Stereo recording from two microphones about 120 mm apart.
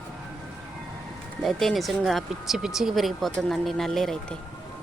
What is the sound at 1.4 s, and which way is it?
Speech, centre (ahead or behind).